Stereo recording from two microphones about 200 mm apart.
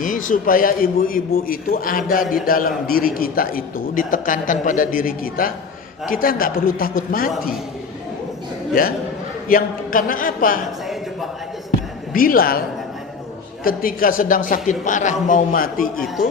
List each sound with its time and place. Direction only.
0.0 s a man's voice: 40° left (ahead or behind)
8.8 s a man's voice: 45° left (ahead or behind)
12.1 s a man's voice: 45° left (ahead or behind)
13.7 s a man's voice: 45° left (ahead or behind)